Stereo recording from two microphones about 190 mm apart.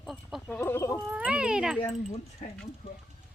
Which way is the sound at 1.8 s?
30° left (ahead or behind).